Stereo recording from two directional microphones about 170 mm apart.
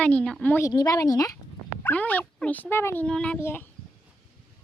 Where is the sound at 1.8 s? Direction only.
10° left (ahead or behind).